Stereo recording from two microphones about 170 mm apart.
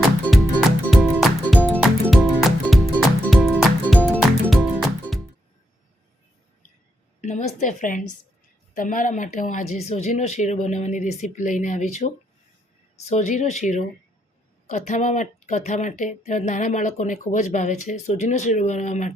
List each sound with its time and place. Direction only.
1.2 s music: 5° left (ahead or behind)
7.2 s a woman's voice: 45° left (ahead or behind)